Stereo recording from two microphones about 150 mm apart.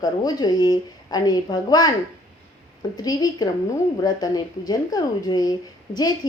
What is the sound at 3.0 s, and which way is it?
A woman's voice, 25° left (ahead or behind).